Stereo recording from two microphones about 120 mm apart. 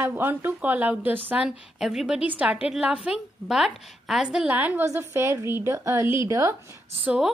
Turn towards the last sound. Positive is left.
turn(degrees=-10)  # may be behind; listen again after turning